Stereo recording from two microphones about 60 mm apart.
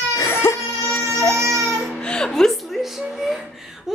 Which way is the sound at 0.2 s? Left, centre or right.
Left.